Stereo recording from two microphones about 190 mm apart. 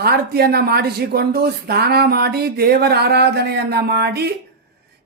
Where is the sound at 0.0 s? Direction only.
55° right (ahead or behind).